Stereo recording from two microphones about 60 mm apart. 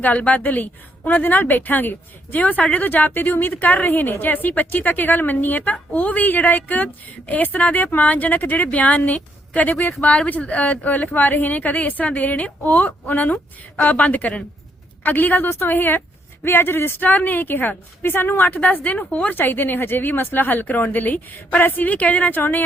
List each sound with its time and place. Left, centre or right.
0.0 s a woman's voice: left
18.5 s a woman's voice: left
22.4 s a woman's voice: left